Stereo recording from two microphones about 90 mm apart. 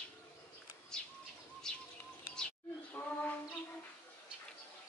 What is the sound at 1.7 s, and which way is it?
Bird, 10° left (ahead or behind).